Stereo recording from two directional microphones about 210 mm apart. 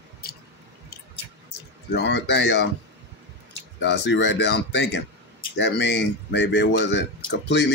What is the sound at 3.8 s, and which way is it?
Speech, 60° left (ahead or behind).